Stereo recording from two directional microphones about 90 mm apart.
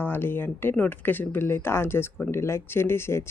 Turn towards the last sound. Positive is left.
turn(degrees=30)  # may be behind; listen again after turning